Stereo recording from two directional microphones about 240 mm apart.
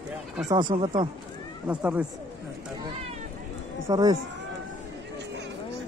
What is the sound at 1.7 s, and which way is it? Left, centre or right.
Speech, centre.